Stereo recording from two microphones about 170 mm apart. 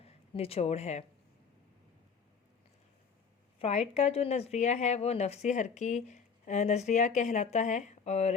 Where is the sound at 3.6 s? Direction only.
40° left (ahead or behind).